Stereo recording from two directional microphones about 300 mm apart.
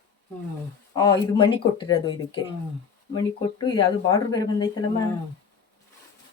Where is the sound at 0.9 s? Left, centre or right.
Centre.